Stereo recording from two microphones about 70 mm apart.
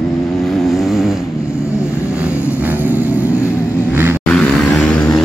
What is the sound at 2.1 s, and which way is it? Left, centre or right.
Vehicle, centre.